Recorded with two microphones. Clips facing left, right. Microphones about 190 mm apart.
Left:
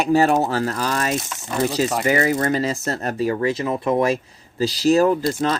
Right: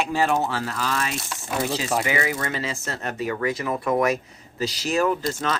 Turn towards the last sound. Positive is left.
turn(degrees=35)  # may be behind; listen again after turning